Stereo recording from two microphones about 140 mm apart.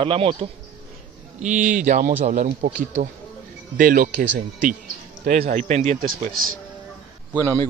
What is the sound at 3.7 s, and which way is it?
Speech, 85° right.